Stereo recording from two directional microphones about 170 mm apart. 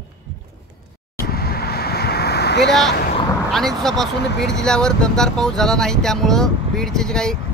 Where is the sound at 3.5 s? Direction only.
Centre (ahead or behind).